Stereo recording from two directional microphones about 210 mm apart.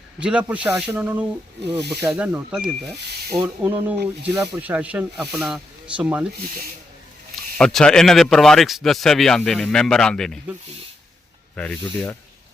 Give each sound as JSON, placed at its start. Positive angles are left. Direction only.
{"t": 0.2, "sound": "speech", "side_deg": -5}
{"t": 1.6, "sound": "speech", "side_deg": -50}
{"t": 2.0, "sound": "speech", "side_deg": -10}
{"t": 7.6, "sound": "speech", "side_deg": 5}
{"t": 11.5, "sound": "speech", "side_deg": 5}